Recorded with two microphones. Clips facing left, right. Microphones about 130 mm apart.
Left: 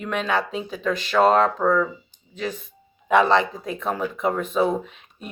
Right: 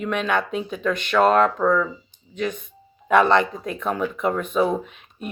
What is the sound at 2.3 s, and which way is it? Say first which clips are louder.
Speech: right 3 dB; 30° left (ahead or behind).